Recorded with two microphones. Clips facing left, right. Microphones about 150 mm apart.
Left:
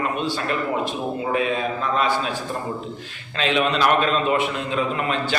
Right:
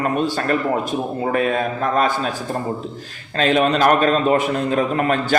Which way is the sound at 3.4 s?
45° right (ahead or behind).